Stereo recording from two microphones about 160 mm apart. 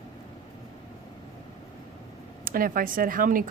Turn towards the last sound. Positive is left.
turn(degrees=-60)  # may be behind; listen again after turning